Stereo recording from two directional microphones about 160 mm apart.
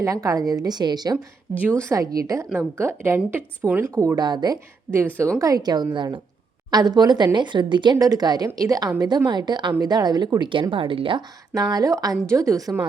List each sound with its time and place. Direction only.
0.0 s speech: 20° right (ahead or behind)